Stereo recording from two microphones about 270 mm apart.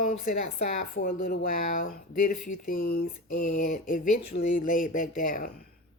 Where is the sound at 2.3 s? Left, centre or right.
Left.